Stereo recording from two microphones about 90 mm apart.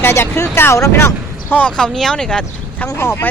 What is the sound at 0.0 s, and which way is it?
Speech, 30° left (ahead or behind).